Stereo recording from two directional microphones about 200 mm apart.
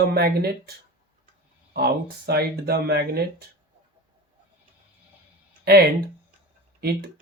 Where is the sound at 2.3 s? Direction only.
50° right (ahead or behind).